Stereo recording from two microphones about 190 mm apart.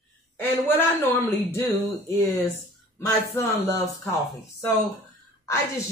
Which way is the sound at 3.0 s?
15° left (ahead or behind).